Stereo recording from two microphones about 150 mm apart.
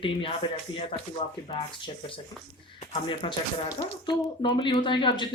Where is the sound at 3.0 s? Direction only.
30° left (ahead or behind).